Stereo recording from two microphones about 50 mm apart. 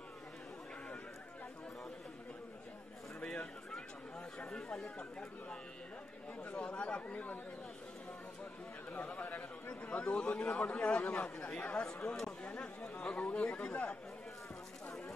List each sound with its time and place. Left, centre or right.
4.5 s chatter: centre
6.4 s chatter: left
8.9 s chatter: left
9.8 s a sound: left
10.4 s chatter: left
11.8 s a sound: centre
12.5 s chatter: left